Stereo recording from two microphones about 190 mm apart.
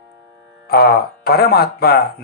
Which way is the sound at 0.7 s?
55° left (ahead or behind).